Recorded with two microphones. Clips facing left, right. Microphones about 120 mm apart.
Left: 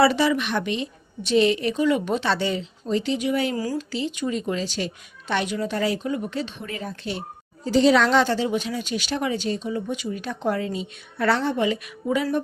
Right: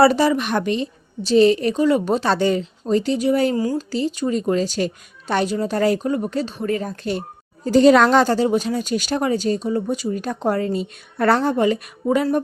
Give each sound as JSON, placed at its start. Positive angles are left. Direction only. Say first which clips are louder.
{"t": 0.0, "sound": "a woman's voice", "louder": "right 4 dB", "side_deg": -40}